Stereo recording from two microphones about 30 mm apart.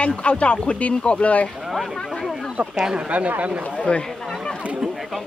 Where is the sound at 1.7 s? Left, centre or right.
Centre.